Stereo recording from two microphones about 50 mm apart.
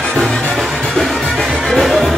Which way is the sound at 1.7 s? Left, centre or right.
Centre.